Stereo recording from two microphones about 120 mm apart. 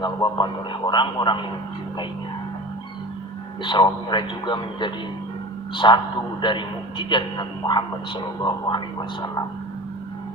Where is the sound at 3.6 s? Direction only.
40° left (ahead or behind).